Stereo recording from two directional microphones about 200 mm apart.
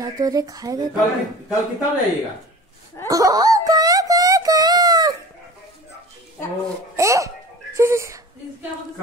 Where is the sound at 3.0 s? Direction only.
15° right (ahead or behind).